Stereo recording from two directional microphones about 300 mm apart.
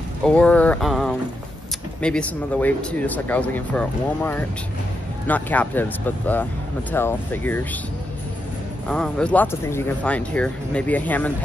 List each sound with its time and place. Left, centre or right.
0.2 s speech: centre
8.8 s speech: centre